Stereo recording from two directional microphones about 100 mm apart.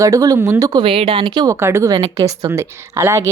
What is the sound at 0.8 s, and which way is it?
Speech, 70° right (ahead or behind).